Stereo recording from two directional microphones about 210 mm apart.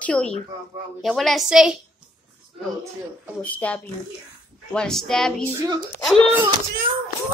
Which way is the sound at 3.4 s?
5° left (ahead or behind).